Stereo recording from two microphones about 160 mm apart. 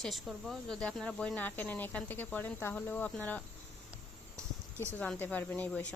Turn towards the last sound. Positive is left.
turn(degrees=10)  # may be behind; listen again after turning